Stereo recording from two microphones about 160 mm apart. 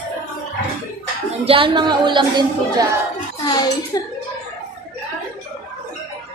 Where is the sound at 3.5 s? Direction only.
25° left (ahead or behind).